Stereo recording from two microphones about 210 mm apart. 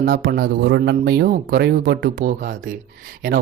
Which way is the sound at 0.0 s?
50° right (ahead or behind).